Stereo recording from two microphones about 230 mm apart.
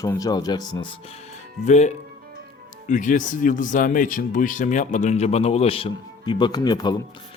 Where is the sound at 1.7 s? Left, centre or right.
Left.